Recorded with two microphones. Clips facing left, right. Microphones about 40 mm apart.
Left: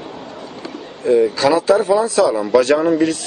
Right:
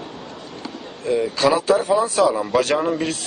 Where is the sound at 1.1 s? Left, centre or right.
Left.